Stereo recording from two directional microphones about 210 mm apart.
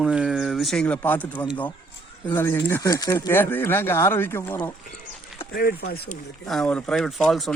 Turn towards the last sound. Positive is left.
turn(degrees=0)  # may be behind; listen again after turning